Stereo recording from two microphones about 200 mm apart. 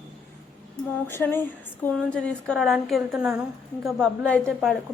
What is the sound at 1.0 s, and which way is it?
A woman's voice, 10° left (ahead or behind).